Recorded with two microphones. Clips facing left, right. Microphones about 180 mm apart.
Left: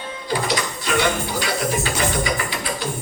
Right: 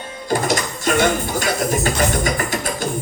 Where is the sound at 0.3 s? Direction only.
45° right (ahead or behind).